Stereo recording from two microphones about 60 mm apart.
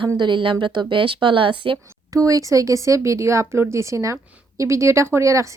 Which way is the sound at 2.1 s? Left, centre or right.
Right.